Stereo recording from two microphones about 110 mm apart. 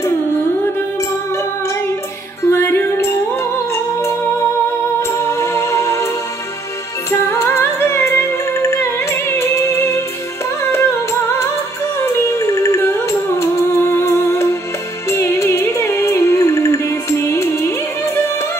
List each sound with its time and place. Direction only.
2.5 s music: 20° left (ahead or behind)